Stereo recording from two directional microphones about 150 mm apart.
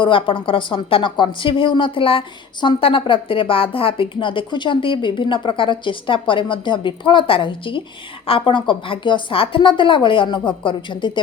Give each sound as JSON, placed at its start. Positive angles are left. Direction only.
{"t": 0.0, "sound": "a woman's voice", "side_deg": 35}